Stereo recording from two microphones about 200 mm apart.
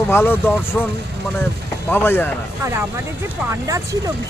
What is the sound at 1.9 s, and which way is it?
Speech, 10° left (ahead or behind).